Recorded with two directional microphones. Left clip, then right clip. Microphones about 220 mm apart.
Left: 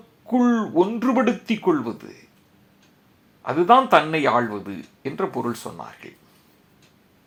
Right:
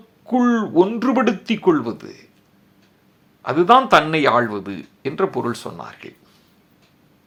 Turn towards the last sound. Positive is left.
turn(degrees=-20)  # may be behind; listen again after turning